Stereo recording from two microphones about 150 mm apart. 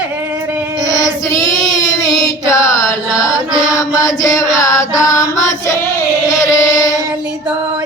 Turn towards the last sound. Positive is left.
turn(degrees=20)  # may be behind; listen again after turning